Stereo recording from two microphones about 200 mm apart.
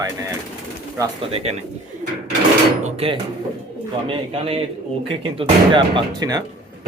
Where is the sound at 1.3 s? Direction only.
30° right (ahead or behind).